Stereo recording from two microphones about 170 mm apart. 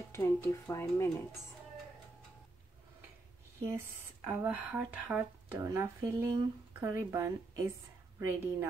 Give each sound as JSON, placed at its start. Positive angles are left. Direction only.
{"t": 0.1, "sound": "speech", "side_deg": 15}
{"t": 3.6, "sound": "speech", "side_deg": -15}